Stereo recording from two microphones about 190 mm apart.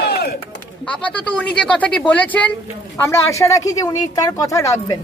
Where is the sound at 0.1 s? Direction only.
55° left (ahead or behind).